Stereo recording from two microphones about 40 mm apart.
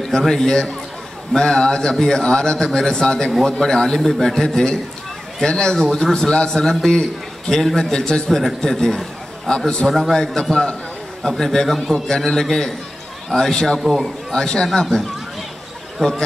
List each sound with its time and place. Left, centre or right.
0.2 s a man's voice: centre
13.7 s a man's voice: centre
14.0 s a man's voice: centre